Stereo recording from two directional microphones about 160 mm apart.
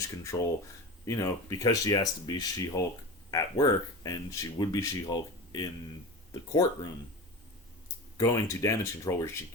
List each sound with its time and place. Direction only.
0.3 s speech: 20° left (ahead or behind)
8.2 s speech: 20° left (ahead or behind)